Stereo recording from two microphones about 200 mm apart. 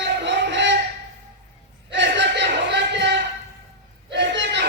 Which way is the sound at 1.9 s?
60° right (ahead or behind).